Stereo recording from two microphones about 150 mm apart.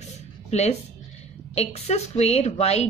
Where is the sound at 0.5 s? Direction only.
45° left (ahead or behind).